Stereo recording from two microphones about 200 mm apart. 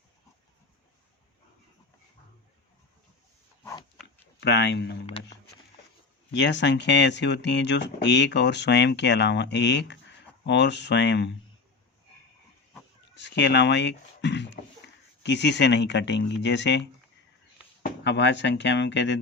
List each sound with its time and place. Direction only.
3.6 s dog: 15° left (ahead or behind)
4.0 s a sound: 60° left (ahead or behind)
6.3 s speech: 65° left (ahead or behind)
13.1 s speech: 60° left (ahead or behind)
18.0 s speech: 60° left (ahead or behind)